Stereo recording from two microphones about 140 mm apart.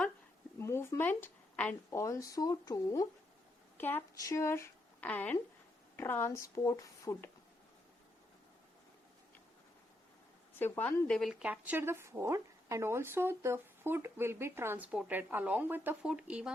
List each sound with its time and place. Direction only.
0.6 s speech: 20° left (ahead or behind)
3.8 s a woman's voice: 15° left (ahead or behind)
10.6 s a woman's voice: 15° left (ahead or behind)
11.2 s speech: 5° right (ahead or behind)